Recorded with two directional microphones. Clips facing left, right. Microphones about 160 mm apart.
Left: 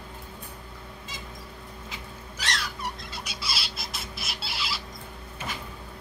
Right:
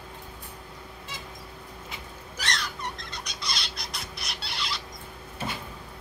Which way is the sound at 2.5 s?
5° left (ahead or behind).